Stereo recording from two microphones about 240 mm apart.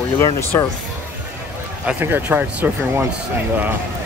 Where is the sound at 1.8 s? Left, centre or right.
Centre.